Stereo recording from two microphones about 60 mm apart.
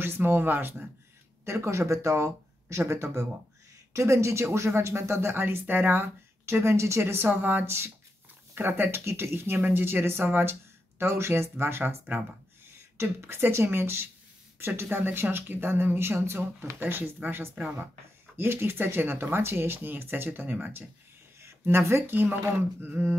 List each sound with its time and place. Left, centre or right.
0.0 s speech: right
1.4 s speech: right
13.0 s speech: right
21.6 s speech: right
22.1 s speech: right